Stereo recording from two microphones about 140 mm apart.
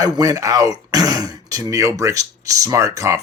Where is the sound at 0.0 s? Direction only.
25° right (ahead or behind).